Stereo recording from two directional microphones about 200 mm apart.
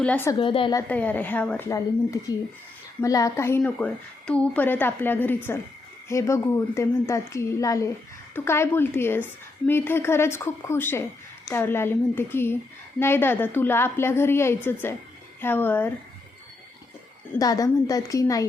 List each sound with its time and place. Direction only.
0.0 s a woman's voice: 10° left (ahead or behind)
0.3 s a woman's voice: 25° left (ahead or behind); by 15.9 s 10° left (ahead or behind)
17.3 s a woman's voice: 20° left (ahead or behind)